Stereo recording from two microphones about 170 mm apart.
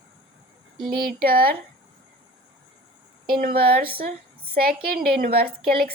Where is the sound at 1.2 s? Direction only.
60° right (ahead or behind).